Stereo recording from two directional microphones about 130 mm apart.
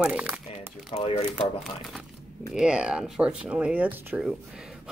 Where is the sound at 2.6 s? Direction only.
5° right (ahead or behind).